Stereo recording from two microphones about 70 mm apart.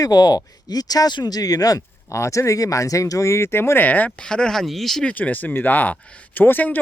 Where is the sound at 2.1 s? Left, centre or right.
Left.